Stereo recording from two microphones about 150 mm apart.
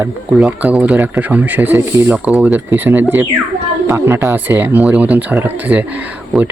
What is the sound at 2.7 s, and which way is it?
Speech, 15° right (ahead or behind).